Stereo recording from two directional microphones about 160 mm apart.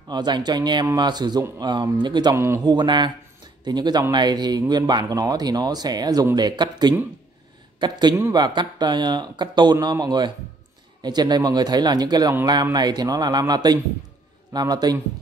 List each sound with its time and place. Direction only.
0.1 s speech: 25° right (ahead or behind)
2.3 s speech: 15° right (ahead or behind)